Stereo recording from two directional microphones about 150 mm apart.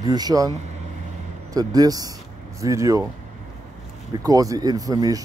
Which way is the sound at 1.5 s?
25° right (ahead or behind).